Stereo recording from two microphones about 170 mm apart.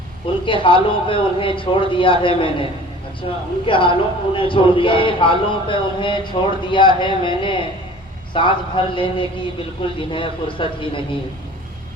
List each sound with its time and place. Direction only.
0.4 s a man's voice: 30° left (ahead or behind)
3.7 s a man's voice: 30° left (ahead or behind)